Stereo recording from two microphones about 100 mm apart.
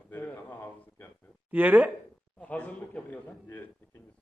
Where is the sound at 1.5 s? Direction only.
15° right (ahead or behind).